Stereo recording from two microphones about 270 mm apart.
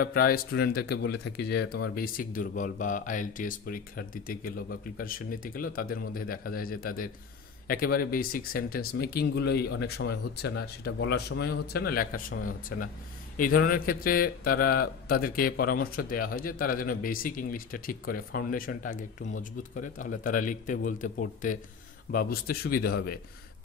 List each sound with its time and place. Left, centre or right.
0.0 s a man's voice: left